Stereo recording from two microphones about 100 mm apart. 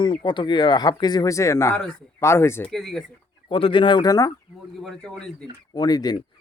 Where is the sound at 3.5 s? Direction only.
60° left (ahead or behind); by 4.3 s 40° left (ahead or behind).